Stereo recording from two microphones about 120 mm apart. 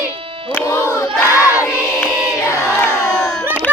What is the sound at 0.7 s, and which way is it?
Crowd, 25° left (ahead or behind).